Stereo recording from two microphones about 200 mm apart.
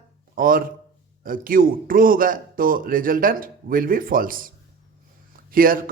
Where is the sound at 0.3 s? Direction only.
45° right (ahead or behind).